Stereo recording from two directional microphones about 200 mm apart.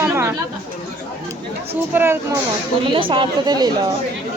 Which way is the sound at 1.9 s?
10° right (ahead or behind).